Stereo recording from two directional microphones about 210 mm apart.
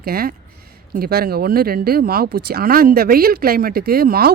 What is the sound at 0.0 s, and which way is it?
Speech, 45° right (ahead or behind).